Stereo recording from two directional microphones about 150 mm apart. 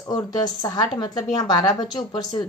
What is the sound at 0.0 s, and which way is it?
A woman's voice, 25° left (ahead or behind).